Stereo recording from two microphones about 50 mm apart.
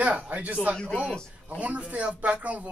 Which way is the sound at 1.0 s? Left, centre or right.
Left.